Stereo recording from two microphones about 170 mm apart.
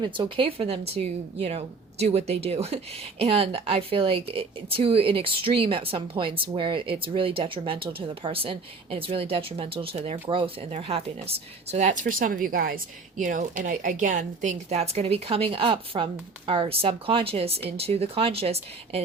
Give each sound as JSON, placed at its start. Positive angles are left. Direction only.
{"t": 0.0, "sound": "a woman's voice", "side_deg": -30}